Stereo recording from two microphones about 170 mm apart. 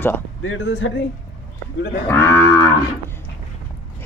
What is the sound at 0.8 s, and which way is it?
Speech, 90° left.